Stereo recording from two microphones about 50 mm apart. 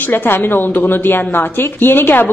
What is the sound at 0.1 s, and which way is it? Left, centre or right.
A woman's voice, left.